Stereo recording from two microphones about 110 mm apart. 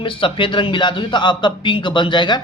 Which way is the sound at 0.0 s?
55° left (ahead or behind).